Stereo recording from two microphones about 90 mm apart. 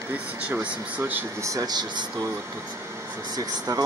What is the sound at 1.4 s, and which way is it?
Speech, 35° right (ahead or behind).